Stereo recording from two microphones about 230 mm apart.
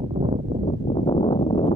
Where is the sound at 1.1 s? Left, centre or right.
Centre.